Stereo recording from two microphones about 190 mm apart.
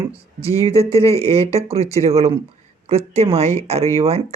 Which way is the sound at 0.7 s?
30° right (ahead or behind).